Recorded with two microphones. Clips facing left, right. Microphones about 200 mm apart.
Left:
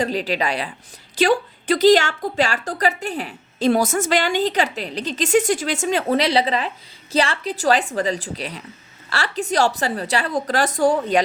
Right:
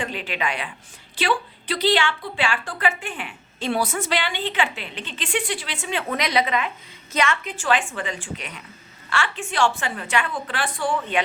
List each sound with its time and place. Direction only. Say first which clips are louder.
0.0 s a woman's voice: left 6 dB; 35° left (ahead or behind)